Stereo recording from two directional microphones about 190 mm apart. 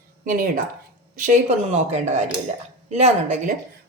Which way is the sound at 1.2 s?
35° right (ahead or behind).